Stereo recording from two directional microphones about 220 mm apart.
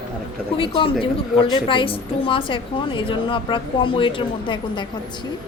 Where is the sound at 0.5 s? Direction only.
25° left (ahead or behind).